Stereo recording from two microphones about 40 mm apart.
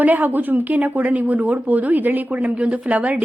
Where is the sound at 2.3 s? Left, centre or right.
Right.